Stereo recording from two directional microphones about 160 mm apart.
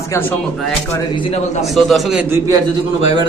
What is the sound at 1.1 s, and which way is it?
Speech, 35° left (ahead or behind).